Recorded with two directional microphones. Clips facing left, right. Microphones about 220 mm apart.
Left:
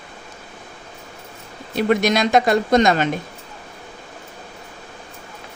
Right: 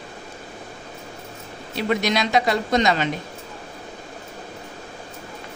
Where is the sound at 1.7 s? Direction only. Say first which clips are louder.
Left 4 dB; 50° left (ahead or behind).